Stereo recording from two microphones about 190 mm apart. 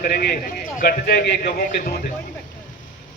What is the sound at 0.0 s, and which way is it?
A man's voice, 55° left (ahead or behind).